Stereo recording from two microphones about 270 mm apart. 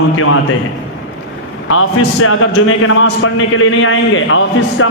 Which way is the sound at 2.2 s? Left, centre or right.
Left.